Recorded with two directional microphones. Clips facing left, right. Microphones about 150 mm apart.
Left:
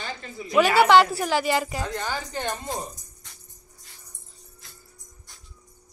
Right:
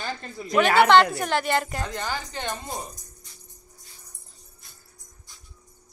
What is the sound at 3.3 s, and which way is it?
Music, 75° left (ahead or behind).